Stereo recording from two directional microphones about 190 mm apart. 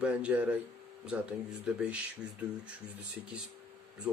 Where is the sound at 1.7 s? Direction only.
5° right (ahead or behind).